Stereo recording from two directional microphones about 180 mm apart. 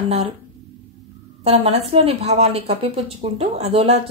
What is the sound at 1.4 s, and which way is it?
Speech, 35° right (ahead or behind).